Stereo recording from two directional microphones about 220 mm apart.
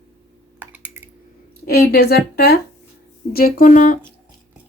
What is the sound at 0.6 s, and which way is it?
Computer keyboard, 5° right (ahead or behind).